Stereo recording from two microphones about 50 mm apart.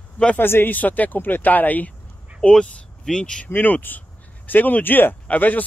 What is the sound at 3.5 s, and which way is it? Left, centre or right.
Speech, left.